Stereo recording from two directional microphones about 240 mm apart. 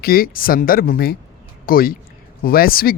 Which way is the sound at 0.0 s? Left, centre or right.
Left.